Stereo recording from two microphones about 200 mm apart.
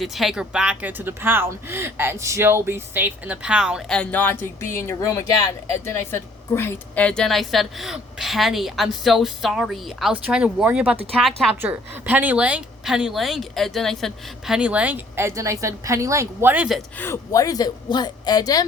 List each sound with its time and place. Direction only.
0.0 s speech: centre (ahead or behind)
11.6 s speech: 10° right (ahead or behind)
17.0 s speech: 15° left (ahead or behind)